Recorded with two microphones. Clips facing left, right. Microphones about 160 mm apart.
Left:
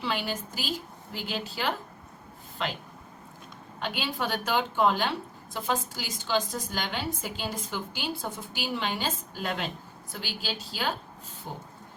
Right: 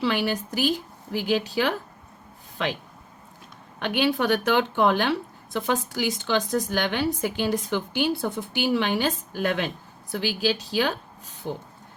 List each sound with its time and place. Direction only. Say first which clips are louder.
0.0 s a woman's voice: right 7 dB; 70° right (ahead or behind)
1.3 s speech: right 8 dB; 85° right
3.8 s a woman's voice: right 9 dB; 70° right (ahead or behind)